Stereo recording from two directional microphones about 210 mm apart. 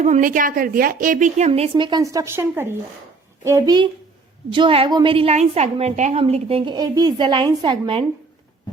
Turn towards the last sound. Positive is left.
turn(degrees=-20)  # may be behind; listen again after turning